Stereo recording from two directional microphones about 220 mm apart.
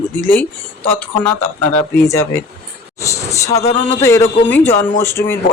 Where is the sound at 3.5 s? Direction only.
30° left (ahead or behind).